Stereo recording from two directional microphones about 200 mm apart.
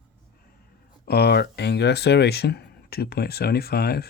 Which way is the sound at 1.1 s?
55° left (ahead or behind).